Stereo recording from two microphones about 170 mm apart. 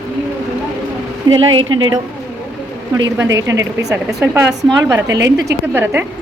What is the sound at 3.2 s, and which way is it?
Speech, 20° right (ahead or behind).